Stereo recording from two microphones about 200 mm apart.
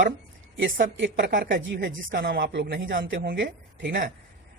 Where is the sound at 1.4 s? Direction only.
65° right (ahead or behind).